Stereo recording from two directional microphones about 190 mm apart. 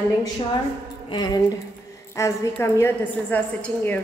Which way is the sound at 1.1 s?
20° left (ahead or behind).